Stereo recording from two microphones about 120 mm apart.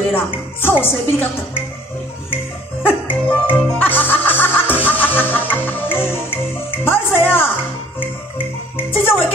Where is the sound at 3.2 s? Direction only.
15° left (ahead or behind).